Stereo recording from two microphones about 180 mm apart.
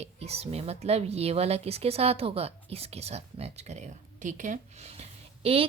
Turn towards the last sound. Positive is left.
turn(degrees=-35)  # may be behind; listen again after turning